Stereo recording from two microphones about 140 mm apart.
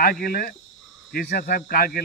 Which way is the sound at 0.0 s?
90° left.